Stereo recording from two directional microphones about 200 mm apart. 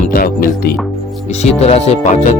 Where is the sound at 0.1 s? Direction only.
45° left (ahead or behind).